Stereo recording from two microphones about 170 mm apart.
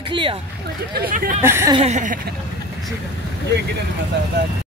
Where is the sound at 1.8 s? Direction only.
45° right (ahead or behind).